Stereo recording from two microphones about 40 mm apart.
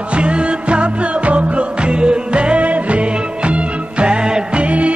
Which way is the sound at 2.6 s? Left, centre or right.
Right.